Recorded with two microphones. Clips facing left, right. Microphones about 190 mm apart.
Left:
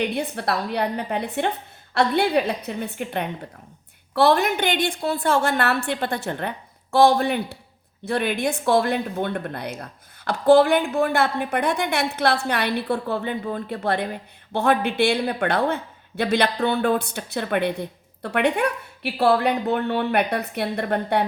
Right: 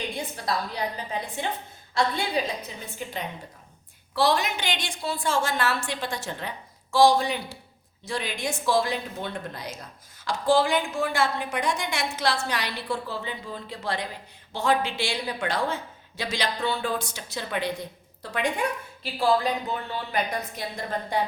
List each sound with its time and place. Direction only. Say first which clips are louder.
0.0 s a woman's voice: left 7 dB; 65° left (ahead or behind)